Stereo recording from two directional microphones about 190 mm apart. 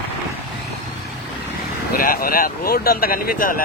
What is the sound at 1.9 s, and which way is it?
Speech, 50° left (ahead or behind).